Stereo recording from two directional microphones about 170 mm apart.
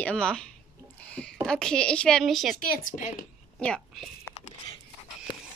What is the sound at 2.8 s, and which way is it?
Speech, 50° left (ahead or behind).